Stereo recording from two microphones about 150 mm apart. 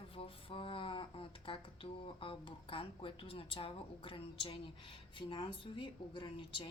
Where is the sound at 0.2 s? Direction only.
35° left (ahead or behind).